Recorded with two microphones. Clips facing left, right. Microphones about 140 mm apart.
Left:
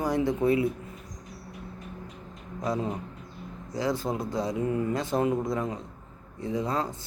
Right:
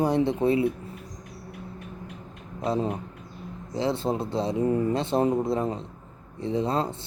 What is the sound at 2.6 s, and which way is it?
Speech, 25° right (ahead or behind).